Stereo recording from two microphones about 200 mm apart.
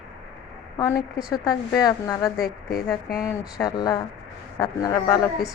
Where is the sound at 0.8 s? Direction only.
20° left (ahead or behind).